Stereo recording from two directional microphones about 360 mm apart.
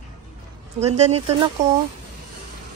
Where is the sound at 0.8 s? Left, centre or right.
Centre.